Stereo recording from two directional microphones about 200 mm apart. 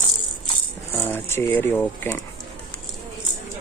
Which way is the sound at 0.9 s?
10° left (ahead or behind).